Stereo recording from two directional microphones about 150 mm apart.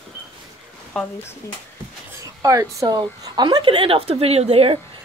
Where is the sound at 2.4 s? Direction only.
20° right (ahead or behind); by 4.7 s 45° right (ahead or behind).